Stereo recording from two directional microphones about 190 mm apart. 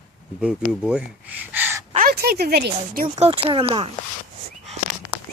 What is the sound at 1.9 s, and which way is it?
Speech, 50° right (ahead or behind).